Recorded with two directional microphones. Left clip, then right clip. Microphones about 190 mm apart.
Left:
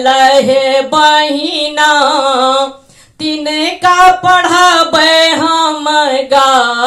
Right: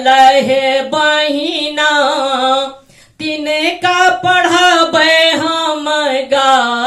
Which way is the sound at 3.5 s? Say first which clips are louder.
Left 3 dB; 20° left (ahead or behind).